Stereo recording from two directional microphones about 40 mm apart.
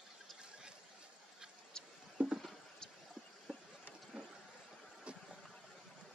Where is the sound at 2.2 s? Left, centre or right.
Right.